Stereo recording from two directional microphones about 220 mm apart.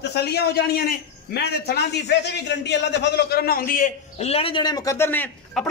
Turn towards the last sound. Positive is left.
turn(degrees=10)  # may be behind; listen again after turning